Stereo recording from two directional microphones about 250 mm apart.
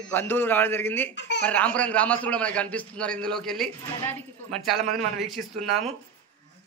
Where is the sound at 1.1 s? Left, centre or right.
Left.